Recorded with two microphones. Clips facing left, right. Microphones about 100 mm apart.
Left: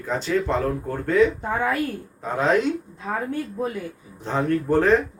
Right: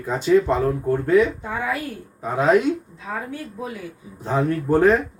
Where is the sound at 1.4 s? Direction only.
50° left (ahead or behind).